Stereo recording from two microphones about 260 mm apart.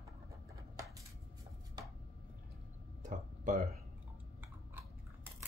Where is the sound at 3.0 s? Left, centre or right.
Right.